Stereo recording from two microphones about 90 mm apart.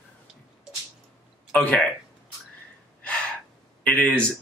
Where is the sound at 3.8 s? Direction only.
10° left (ahead or behind).